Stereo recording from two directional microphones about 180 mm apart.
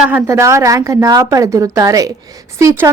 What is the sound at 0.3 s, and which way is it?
A woman's voice, 15° right (ahead or behind).